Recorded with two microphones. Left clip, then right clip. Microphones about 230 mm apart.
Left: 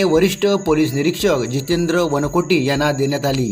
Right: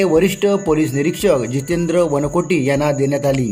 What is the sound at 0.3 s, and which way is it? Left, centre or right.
Speech, centre.